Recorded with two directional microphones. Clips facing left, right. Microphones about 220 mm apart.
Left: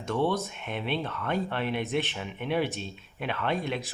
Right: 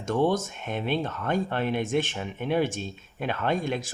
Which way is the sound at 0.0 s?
45° right (ahead or behind).